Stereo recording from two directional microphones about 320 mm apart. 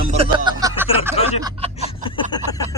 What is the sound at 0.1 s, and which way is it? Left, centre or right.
Snicker, centre.